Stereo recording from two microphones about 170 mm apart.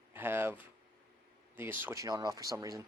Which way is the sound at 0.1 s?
15° right (ahead or behind).